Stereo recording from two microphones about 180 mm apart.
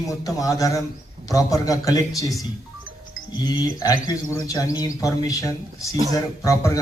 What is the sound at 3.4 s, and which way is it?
A man's voice, 20° left (ahead or behind).